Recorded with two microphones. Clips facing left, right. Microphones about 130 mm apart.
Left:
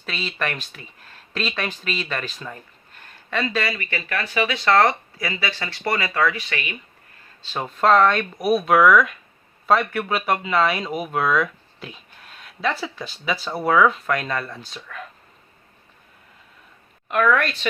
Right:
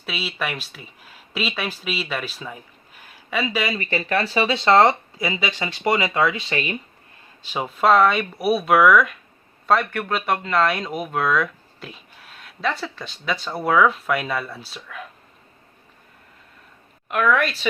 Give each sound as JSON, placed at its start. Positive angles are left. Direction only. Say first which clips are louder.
{"t": 0.0, "sound": "speech", "louder": "even", "side_deg": -5}
{"t": 3.8, "sound": "speech", "louder": "right 5 dB", "side_deg": -35}
{"t": 7.4, "sound": "speech", "louder": "even", "side_deg": -10}
{"t": 17.1, "sound": "speech", "louder": "even", "side_deg": 0}